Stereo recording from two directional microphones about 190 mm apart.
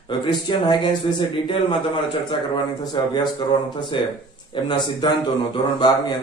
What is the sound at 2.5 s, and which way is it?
A man's voice, 20° left (ahead or behind).